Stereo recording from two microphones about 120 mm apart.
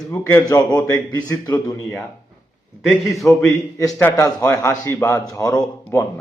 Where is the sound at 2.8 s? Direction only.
Centre (ahead or behind).